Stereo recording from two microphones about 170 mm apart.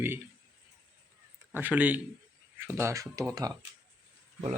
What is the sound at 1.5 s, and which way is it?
A man's voice, 10° right (ahead or behind).